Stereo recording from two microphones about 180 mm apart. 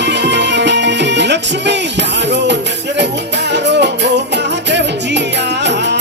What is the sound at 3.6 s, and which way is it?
Music, 75° right (ahead or behind).